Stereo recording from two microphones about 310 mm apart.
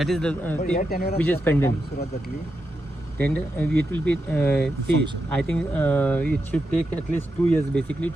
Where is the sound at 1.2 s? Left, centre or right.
Centre.